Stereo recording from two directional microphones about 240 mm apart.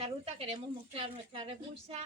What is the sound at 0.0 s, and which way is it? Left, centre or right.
A woman's voice, right.